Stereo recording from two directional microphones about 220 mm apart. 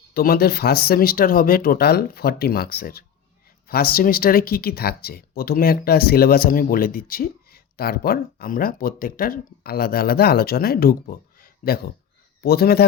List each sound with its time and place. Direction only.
0.1 s speech: 45° left (ahead or behind)